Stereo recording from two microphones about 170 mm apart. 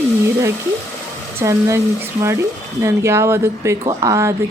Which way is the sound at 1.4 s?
15° right (ahead or behind).